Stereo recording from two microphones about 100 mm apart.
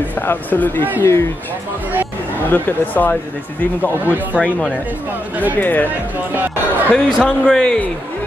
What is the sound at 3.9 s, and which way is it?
Speech, 20° right (ahead or behind).